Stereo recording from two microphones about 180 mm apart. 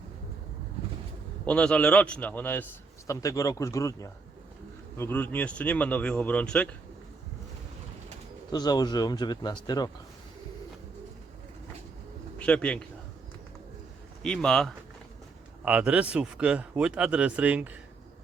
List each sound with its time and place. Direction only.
1.5 s speech: 5° left (ahead or behind)
8.5 s speech: 20° left (ahead or behind)
12.4 s speech: 5° left (ahead or behind)
14.2 s speech: 5° left (ahead or behind)